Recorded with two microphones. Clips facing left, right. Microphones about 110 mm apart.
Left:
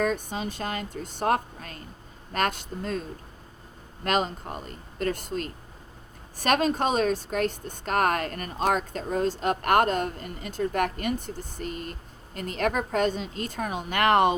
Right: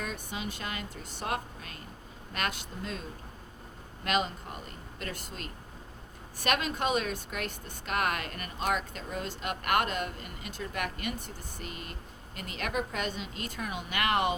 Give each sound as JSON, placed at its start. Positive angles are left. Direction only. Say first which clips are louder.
{"t": 0.0, "sound": "speech", "louder": "left 10 dB", "side_deg": 45}
{"t": 4.0, "sound": "speech", "louder": "left 4 dB", "side_deg": 45}